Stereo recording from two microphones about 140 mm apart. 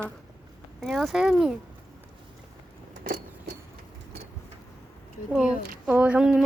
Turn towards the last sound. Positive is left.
turn(degrees=-5)  # may be behind; listen again after turning